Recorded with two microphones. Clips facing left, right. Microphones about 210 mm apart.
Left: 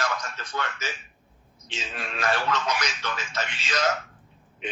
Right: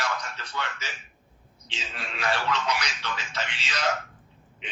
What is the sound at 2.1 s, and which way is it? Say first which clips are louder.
A man's voice: left 2 dB; 45° left (ahead or behind).